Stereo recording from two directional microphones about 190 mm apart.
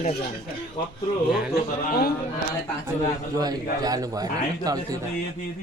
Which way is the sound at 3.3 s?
20° right (ahead or behind).